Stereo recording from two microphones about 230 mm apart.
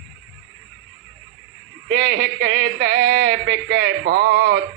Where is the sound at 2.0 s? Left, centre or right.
Right.